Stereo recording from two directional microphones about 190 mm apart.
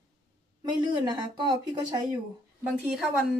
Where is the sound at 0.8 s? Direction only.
25° right (ahead or behind).